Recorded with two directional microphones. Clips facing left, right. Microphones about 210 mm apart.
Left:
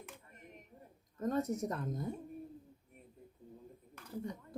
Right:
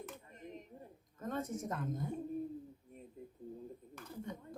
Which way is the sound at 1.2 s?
40° left (ahead or behind).